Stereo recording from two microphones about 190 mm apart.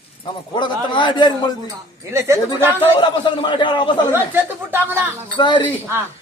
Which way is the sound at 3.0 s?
25° left (ahead or behind).